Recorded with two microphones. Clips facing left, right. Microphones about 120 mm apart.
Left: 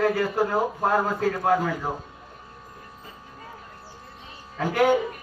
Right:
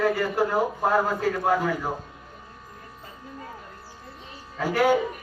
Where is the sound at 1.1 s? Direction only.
5° right (ahead or behind).